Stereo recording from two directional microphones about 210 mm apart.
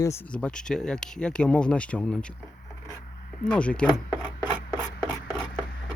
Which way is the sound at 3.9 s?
20° left (ahead or behind).